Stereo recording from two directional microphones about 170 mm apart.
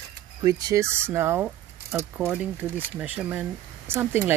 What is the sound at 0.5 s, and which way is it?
Speech, 20° right (ahead or behind).